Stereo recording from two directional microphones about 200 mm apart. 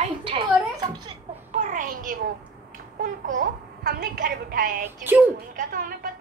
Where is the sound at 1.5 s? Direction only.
40° right (ahead or behind).